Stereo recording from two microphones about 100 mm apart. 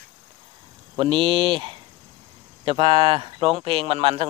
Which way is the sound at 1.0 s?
60° right (ahead or behind).